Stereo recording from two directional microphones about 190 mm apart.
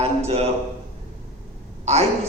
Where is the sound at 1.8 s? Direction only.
35° right (ahead or behind).